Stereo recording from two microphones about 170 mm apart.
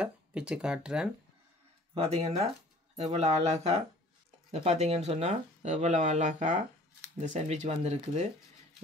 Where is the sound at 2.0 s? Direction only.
40° right (ahead or behind).